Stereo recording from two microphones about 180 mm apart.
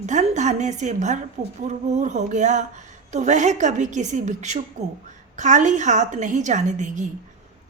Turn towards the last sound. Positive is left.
turn(degrees=-40)  # may be behind; listen again after turning